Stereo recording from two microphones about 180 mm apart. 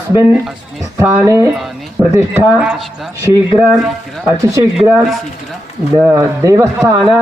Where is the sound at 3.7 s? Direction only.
5° right (ahead or behind).